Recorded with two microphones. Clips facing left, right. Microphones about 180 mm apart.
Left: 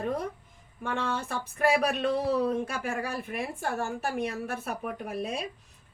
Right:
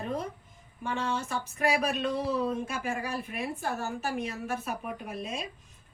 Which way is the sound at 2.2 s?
60° left (ahead or behind).